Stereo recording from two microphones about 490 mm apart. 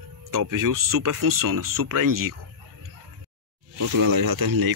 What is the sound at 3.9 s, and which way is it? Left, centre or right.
Speech, right.